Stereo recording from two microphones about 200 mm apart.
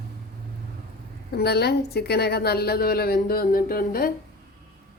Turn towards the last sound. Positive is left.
turn(degrees=45)  # may be behind; listen again after turning